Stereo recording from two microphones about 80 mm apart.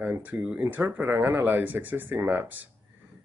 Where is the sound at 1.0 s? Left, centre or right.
Right.